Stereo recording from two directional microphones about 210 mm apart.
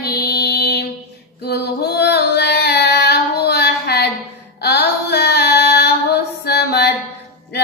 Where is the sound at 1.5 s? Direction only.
55° left (ahead or behind).